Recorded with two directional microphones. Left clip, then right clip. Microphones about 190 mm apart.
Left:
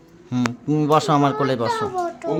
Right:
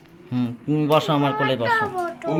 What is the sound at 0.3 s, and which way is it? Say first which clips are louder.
A child's voice: left 2 dB; 15° left (ahead or behind).